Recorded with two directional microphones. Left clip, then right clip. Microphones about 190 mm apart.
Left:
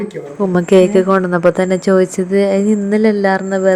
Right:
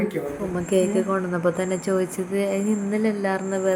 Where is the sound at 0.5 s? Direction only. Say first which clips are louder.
Left 12 dB; 50° left (ahead or behind).